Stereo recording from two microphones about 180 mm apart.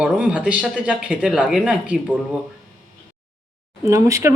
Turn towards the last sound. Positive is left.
turn(degrees=-15)  # may be behind; listen again after turning